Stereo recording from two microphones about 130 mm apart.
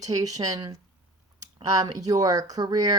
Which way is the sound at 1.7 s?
30° right (ahead or behind).